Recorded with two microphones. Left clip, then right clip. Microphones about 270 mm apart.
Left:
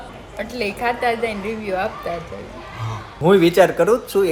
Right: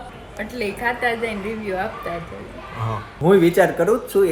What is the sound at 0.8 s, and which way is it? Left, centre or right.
Speech, centre.